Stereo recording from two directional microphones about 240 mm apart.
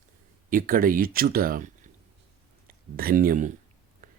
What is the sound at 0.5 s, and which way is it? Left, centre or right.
Speech, right.